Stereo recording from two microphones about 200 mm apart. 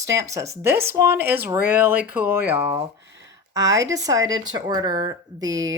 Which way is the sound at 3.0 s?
60° right (ahead or behind).